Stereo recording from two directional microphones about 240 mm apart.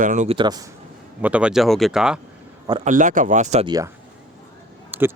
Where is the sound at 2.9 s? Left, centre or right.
Right.